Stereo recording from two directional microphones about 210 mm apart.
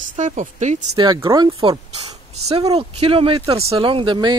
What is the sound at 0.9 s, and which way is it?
Speech, 20° right (ahead or behind).